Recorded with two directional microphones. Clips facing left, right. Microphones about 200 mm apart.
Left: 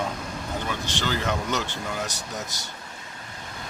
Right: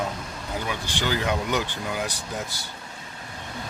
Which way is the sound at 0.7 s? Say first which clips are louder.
Right 2 dB; 15° right (ahead or behind).